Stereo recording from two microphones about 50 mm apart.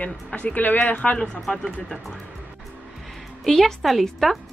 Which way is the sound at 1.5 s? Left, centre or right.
Centre.